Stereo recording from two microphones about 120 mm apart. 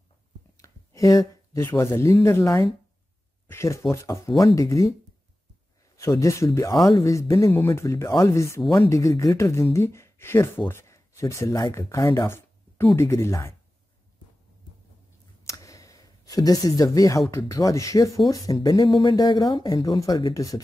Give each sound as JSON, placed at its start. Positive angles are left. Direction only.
{"t": 0.6, "sound": "speech", "side_deg": 30}
{"t": 5.9, "sound": "speech", "side_deg": 25}
{"t": 12.9, "sound": "speech", "side_deg": 20}
{"t": 15.4, "sound": "a sound", "side_deg": 25}
{"t": 17.3, "sound": "speech", "side_deg": 25}